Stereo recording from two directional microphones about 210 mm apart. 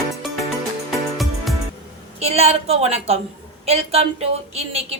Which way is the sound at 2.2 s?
30° right (ahead or behind).